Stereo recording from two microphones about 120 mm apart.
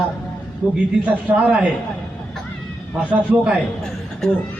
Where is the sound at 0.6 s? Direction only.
10° right (ahead or behind).